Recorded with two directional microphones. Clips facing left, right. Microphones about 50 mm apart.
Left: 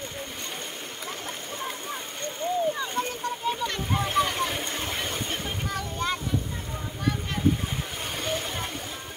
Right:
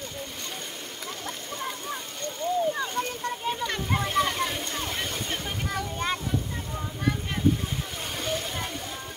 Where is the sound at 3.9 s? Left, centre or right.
Centre.